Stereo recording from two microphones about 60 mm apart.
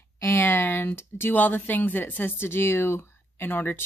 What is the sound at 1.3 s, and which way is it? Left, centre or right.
Speech, left.